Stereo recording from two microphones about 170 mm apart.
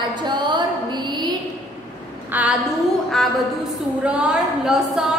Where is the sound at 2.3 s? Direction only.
10° right (ahead or behind).